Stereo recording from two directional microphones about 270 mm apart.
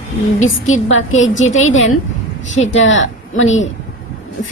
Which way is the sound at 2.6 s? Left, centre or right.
Left.